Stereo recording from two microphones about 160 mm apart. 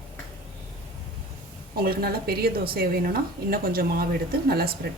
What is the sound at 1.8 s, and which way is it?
Speech, 70° right (ahead or behind).